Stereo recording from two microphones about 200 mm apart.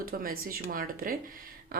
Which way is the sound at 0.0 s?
45° right (ahead or behind).